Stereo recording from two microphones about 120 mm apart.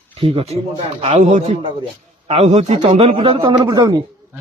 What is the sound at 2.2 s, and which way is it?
A man's voice, 65° right (ahead or behind).